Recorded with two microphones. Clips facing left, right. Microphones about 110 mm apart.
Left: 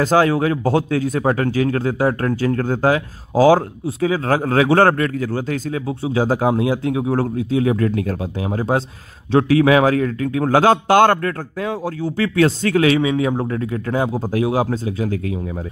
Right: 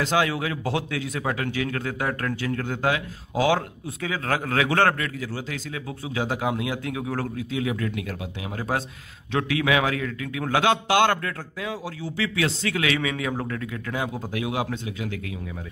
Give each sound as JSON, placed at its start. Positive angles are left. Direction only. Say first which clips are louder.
{"t": 0.0, "sound": "a man's voice", "louder": "left 8 dB", "side_deg": 40}
{"t": 5.9, "sound": "a man's voice", "louder": "left 9 dB", "side_deg": 30}